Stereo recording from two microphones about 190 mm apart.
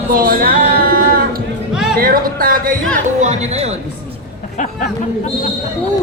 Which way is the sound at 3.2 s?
35° right (ahead or behind).